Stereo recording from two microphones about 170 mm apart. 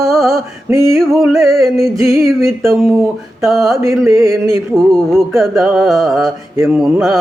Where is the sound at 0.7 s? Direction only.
15° right (ahead or behind).